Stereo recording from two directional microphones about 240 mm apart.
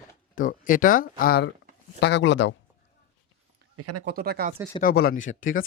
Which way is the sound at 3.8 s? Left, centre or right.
Right.